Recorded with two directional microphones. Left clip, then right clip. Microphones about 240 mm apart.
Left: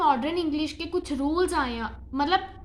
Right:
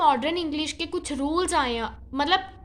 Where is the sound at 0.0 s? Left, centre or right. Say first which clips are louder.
Right 2 dB; right.